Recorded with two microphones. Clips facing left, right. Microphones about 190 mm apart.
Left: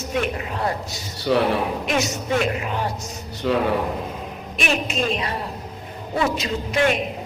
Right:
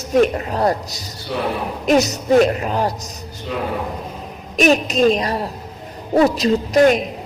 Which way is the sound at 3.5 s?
75° left (ahead or behind).